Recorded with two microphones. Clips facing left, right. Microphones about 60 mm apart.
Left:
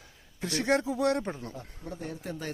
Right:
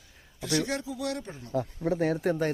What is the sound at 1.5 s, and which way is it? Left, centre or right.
Speech, right.